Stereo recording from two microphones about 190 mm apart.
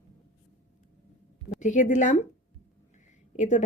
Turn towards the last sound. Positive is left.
turn(degrees=40)  # may be behind; listen again after turning